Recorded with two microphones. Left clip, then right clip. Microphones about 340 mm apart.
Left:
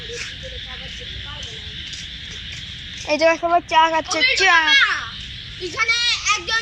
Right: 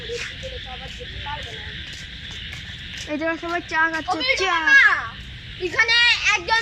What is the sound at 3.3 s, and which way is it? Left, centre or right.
Speech, centre.